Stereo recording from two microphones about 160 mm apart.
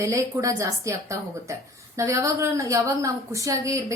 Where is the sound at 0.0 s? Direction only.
20° right (ahead or behind).